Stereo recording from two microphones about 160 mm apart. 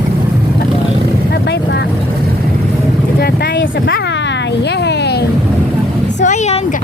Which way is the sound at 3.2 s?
90° left.